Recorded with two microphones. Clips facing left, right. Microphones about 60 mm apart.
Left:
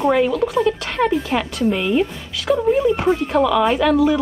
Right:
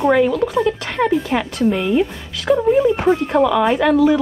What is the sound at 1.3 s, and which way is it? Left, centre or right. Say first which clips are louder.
Speech: right 1 dB; right.